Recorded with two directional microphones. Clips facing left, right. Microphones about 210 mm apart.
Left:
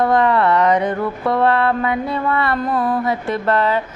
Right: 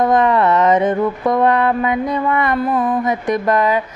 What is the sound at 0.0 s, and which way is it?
Music, 20° right (ahead or behind).